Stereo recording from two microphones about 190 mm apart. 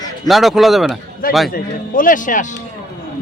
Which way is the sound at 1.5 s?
50° left (ahead or behind).